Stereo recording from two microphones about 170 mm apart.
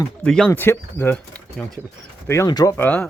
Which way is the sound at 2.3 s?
20° left (ahead or behind).